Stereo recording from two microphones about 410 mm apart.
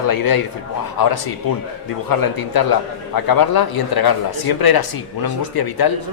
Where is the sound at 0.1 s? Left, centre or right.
Left.